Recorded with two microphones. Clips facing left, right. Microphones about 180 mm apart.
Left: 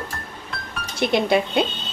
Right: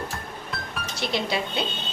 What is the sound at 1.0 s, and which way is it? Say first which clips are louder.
Speech: left 8 dB; 55° left (ahead or behind).